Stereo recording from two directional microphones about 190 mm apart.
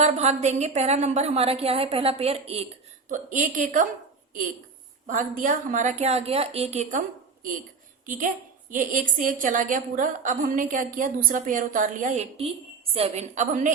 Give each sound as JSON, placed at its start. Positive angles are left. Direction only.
{"t": 0.0, "sound": "a woman's voice", "side_deg": -35}
{"t": 5.0, "sound": "a woman's voice", "side_deg": -45}
{"t": 8.0, "sound": "a woman's voice", "side_deg": -45}